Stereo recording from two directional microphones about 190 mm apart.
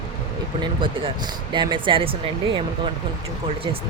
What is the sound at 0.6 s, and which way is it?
Speech, 25° right (ahead or behind).